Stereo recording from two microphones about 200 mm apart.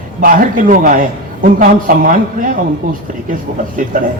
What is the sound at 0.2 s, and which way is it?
A man's voice, 45° right (ahead or behind).